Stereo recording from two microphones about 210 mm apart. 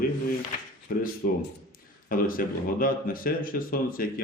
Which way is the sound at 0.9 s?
45° left (ahead or behind).